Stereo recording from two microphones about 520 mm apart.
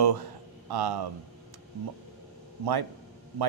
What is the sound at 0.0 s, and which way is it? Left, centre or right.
A man's voice, right.